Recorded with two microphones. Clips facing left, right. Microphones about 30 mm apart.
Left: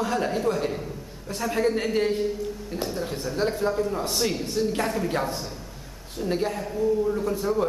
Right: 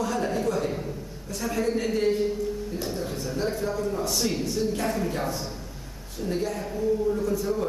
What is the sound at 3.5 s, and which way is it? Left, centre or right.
Speech, left.